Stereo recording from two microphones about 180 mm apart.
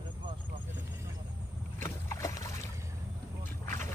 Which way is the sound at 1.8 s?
15° left (ahead or behind).